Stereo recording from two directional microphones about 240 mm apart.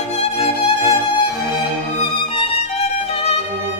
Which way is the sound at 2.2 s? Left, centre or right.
Left.